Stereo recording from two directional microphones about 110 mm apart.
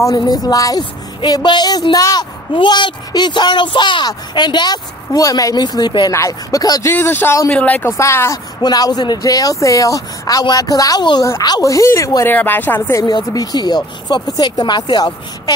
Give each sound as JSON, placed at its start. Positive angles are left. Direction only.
{"t": 0.1, "sound": "speech", "side_deg": 40}
{"t": 2.5, "sound": "speech", "side_deg": 45}
{"t": 6.1, "sound": "speech", "side_deg": 30}
{"t": 6.9, "sound": "speech", "side_deg": 20}
{"t": 8.0, "sound": "speech", "side_deg": 25}
{"t": 8.6, "sound": "speech", "side_deg": 35}
{"t": 12.3, "sound": "speech", "side_deg": 15}
{"t": 13.0, "sound": "speech", "side_deg": 40}